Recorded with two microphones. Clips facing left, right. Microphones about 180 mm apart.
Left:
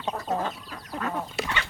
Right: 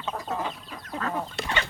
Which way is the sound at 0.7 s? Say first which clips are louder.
Even; 5° left (ahead or behind).